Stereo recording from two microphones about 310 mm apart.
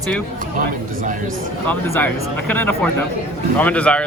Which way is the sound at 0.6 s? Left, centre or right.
Right.